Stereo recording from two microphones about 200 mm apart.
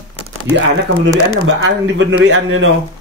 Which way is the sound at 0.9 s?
90° right.